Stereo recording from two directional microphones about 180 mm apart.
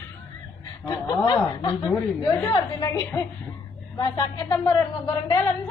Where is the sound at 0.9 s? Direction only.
20° left (ahead or behind).